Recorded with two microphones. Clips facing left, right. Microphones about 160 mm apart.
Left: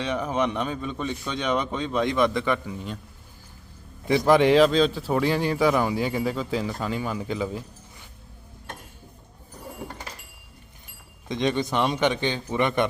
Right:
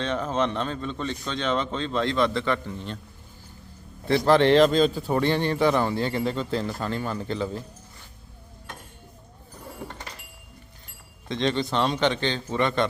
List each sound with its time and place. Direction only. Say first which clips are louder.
0.0 s a man's voice: even; 10° left (ahead or behind)
4.0 s a man's voice: even; 15° left (ahead or behind)
11.3 s a man's voice: left 1 dB; 15° left (ahead or behind)